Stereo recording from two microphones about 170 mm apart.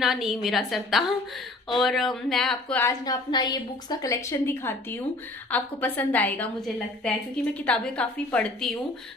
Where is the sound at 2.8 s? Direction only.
25° left (ahead or behind).